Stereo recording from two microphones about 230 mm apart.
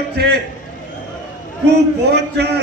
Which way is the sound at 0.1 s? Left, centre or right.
Right.